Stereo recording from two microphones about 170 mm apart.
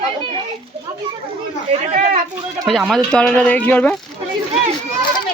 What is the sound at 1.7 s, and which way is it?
Speech, 50° right (ahead or behind).